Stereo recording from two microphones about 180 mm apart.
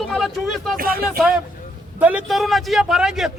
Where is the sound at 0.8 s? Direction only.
55° right (ahead or behind).